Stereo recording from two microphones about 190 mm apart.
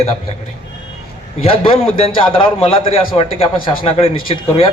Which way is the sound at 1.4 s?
30° left (ahead or behind).